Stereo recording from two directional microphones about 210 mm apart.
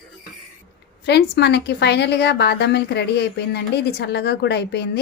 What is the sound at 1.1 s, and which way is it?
A woman's voice, 55° left (ahead or behind).